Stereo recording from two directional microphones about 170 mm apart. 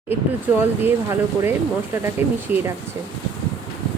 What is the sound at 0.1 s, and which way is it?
Speech, 10° right (ahead or behind).